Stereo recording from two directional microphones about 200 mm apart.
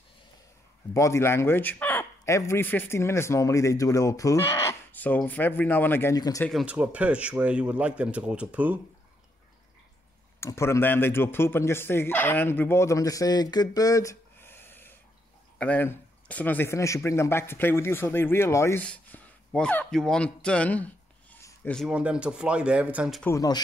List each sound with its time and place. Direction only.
0.9 s speech: 15° left (ahead or behind)
6.6 s speech: 5° right (ahead or behind)
10.4 s speech: 15° left (ahead or behind)
21.7 s a man's voice: 5° right (ahead or behind)
23.2 s speech: 15° left (ahead or behind)